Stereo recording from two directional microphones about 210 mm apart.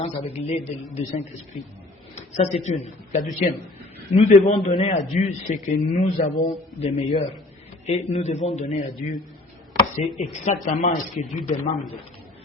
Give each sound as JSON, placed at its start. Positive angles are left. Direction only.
{"t": 0.0, "sound": "a man's voice", "side_deg": 30}
{"t": 5.1, "sound": "a man's voice", "side_deg": 35}